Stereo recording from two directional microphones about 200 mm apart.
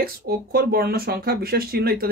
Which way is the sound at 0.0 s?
50° right (ahead or behind).